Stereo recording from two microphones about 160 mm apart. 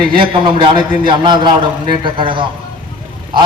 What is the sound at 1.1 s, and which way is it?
A man's voice, 30° right (ahead or behind).